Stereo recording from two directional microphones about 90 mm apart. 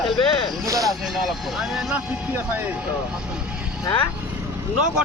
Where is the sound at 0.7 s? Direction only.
40° right (ahead or behind).